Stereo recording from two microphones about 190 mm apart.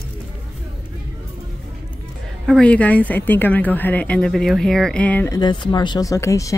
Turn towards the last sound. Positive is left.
turn(degrees=15)  # may be behind; listen again after turning